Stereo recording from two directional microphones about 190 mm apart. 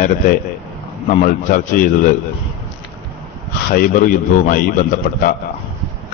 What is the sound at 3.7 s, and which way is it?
Speech, 50° left (ahead or behind).